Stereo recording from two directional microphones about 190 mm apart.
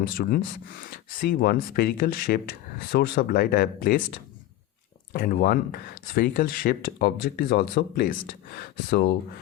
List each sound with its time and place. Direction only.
0.0 s speech: 50° left (ahead or behind)
5.1 s speech: 50° left (ahead or behind)